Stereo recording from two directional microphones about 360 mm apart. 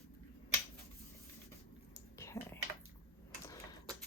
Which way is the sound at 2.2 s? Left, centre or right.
Centre.